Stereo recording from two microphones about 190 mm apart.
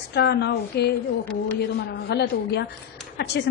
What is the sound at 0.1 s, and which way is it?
A woman's voice, 60° left (ahead or behind).